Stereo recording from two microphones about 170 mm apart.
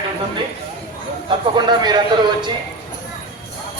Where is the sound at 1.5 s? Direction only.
25° right (ahead or behind).